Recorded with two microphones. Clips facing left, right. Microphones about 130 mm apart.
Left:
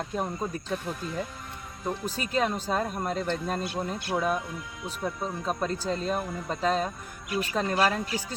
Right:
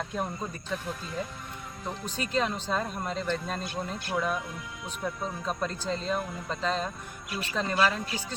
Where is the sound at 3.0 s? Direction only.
45° left (ahead or behind).